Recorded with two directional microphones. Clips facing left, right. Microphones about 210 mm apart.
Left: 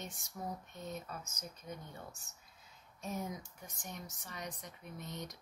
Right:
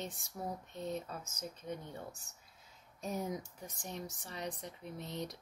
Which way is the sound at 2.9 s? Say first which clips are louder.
Right 3 dB; 35° right (ahead or behind).